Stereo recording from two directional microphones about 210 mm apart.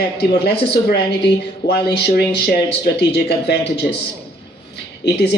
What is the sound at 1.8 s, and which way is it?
Speech, 50° left (ahead or behind).